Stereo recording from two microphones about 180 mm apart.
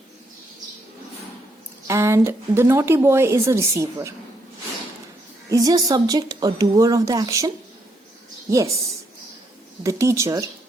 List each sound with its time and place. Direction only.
1.9 s a woman's voice: 15° right (ahead or behind)
5.5 s a woman's voice: 20° right (ahead or behind)
9.8 s a woman's voice: 15° right (ahead or behind)